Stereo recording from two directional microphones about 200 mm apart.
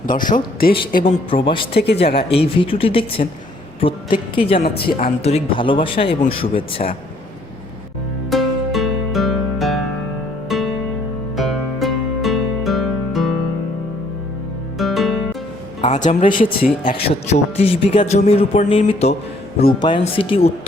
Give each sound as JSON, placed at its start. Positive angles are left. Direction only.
{"t": 0.0, "sound": "speech", "side_deg": 45}
{"t": 1.0, "sound": "a man's voice", "side_deg": 25}
{"t": 4.6, "sound": "a man's voice", "side_deg": 50}
{"t": 8.3, "sound": "music", "side_deg": 0}
{"t": 14.8, "sound": "music", "side_deg": 0}
{"t": 15.9, "sound": "a man's voice", "side_deg": 40}